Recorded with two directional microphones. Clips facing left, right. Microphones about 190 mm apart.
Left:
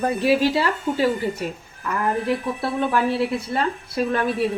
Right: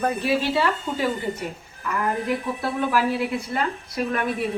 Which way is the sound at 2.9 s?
30° left (ahead or behind).